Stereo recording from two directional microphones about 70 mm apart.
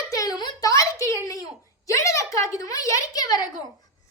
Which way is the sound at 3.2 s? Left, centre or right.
Left.